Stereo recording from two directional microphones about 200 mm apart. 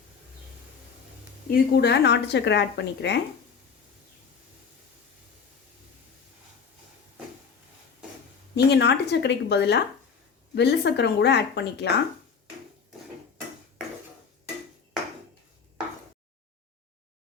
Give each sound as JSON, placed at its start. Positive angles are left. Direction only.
{"t": 1.5, "sound": "a woman's voice", "side_deg": 55}
{"t": 8.5, "sound": "a woman's voice", "side_deg": 55}